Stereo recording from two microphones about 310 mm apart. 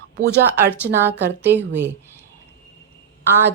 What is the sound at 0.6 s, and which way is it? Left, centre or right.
A woman's voice, centre.